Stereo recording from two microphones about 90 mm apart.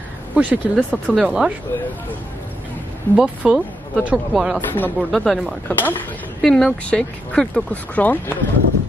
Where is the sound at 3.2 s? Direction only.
10° right (ahead or behind).